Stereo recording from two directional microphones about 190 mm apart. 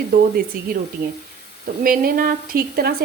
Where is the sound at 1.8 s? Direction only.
50° right (ahead or behind).